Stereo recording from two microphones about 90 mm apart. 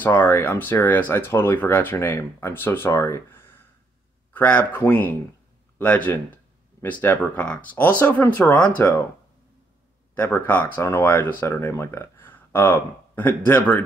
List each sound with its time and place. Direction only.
0.0 s speech: 20° left (ahead or behind)
10.1 s speech: 20° left (ahead or behind)